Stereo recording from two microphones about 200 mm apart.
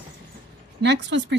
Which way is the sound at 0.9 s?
60° right (ahead or behind).